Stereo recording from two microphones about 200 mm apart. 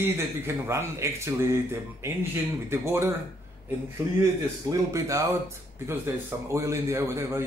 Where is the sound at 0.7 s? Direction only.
15° right (ahead or behind).